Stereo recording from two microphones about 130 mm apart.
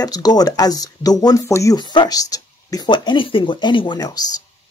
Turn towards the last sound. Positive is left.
turn(degrees=30)  # may be behind; listen again after turning